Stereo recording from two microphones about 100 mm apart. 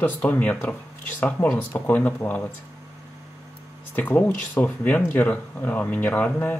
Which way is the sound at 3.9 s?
15° left (ahead or behind).